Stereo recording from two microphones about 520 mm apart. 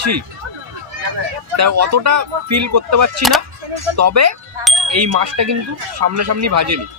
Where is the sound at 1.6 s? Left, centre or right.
Right.